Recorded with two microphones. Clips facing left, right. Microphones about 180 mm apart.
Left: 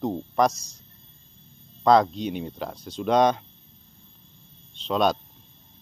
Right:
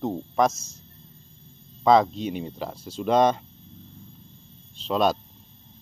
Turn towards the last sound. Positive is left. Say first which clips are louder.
# even
turn(degrees=0)  # may be behind; listen again after turning